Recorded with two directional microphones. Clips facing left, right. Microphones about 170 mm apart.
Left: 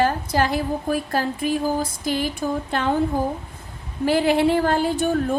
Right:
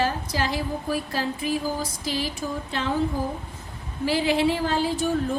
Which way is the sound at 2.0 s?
55° left (ahead or behind).